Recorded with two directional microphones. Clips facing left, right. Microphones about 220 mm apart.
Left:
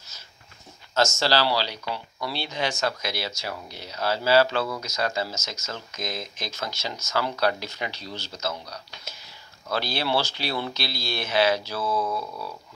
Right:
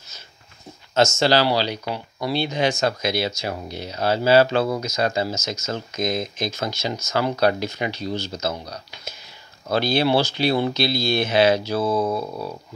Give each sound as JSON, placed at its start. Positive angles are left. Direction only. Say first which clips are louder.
{"t": 1.2, "sound": "speech", "louder": "right 5 dB", "side_deg": -20}
{"t": 9.7, "sound": "speech", "louder": "right 7 dB", "side_deg": -20}
{"t": 12.0, "sound": "a sound", "louder": "right 6 dB", "side_deg": -45}